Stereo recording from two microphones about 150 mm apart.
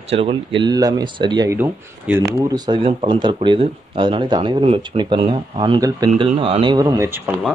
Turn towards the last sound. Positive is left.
turn(degrees=-20)  # may be behind; listen again after turning